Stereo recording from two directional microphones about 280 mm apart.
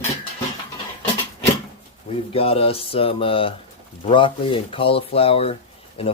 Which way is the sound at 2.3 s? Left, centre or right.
Centre.